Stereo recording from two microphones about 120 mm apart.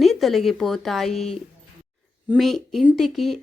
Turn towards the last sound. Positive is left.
turn(degrees=0)  # may be behind; listen again after turning